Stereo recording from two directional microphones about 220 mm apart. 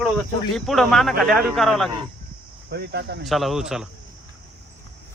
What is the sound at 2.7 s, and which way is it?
Speech, 45° right (ahead or behind).